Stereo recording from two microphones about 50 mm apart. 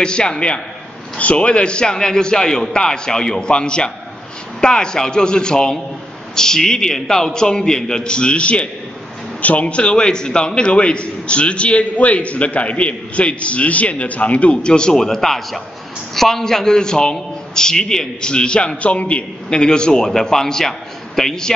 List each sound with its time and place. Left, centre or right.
0.0 s a man's voice: centre